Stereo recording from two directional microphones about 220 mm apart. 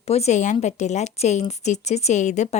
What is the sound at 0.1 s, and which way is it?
A woman's voice, 30° left (ahead or behind).